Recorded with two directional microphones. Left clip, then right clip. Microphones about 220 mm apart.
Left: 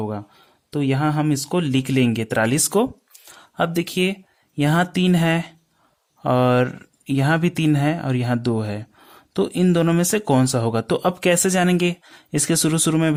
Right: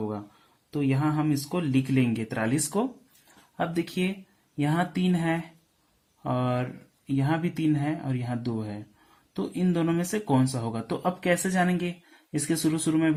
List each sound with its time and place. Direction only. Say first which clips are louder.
0.7 s speech: left 6 dB; 50° left (ahead or behind)